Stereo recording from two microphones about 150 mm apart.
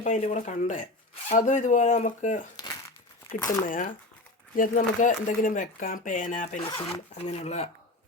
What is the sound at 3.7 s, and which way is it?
Speech, 65° left (ahead or behind).